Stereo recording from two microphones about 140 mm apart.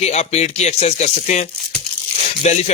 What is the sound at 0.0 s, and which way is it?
A man's voice, 50° left (ahead or behind).